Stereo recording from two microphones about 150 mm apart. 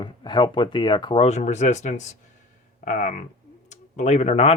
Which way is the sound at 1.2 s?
50° left (ahead or behind).